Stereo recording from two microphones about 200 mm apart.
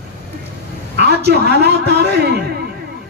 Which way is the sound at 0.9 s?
55° right (ahead or behind).